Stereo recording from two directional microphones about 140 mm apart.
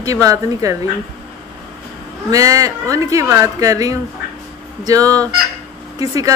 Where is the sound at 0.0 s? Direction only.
25° right (ahead or behind).